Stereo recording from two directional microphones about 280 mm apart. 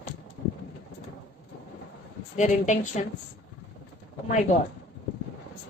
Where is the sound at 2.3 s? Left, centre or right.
Left.